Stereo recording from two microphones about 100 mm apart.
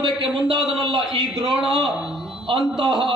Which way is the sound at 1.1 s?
70° right (ahead or behind).